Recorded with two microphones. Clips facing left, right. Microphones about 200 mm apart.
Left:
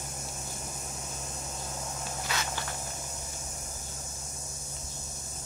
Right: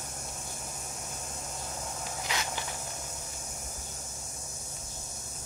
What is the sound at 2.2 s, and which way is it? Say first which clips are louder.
Walk: even; 15° right (ahead or behind).